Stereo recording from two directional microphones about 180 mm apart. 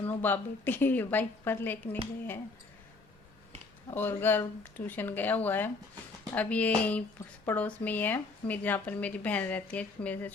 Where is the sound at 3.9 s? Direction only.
10° left (ahead or behind).